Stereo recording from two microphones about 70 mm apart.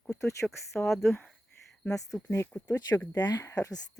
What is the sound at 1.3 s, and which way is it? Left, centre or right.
Cricket, centre.